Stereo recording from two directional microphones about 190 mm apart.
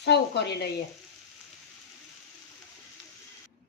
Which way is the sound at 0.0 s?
60° left (ahead or behind).